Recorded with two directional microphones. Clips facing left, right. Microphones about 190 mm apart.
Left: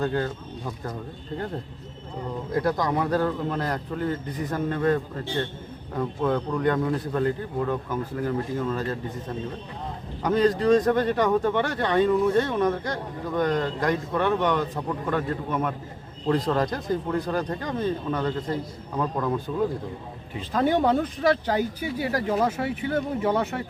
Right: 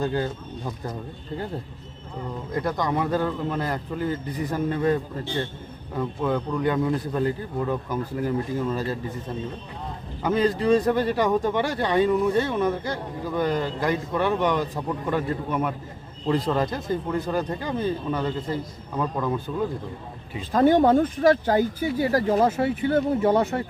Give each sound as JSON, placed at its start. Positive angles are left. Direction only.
{"t": 0.0, "sound": "a man's voice", "side_deg": -10}
{"t": 2.5, "sound": "speech", "side_deg": 0}
{"t": 6.0, "sound": "a man's voice", "side_deg": -5}
{"t": 10.2, "sound": "a man's voice", "side_deg": -5}
{"t": 20.5, "sound": "speech", "side_deg": -45}